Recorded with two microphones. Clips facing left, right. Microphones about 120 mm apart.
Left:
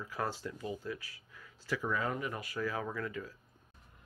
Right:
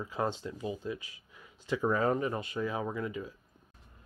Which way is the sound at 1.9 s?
40° right (ahead or behind).